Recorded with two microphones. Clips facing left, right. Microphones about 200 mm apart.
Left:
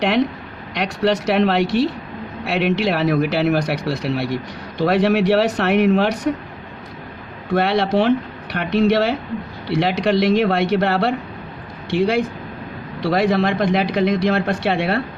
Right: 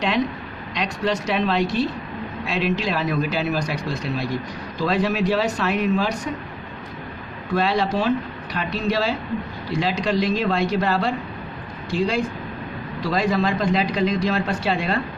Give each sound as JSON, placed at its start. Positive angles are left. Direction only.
{"t": 0.7, "sound": "speech", "side_deg": 65}
{"t": 7.5, "sound": "a man's voice", "side_deg": 70}